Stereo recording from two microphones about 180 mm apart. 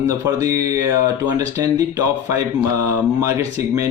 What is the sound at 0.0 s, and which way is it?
Speech, 20° right (ahead or behind).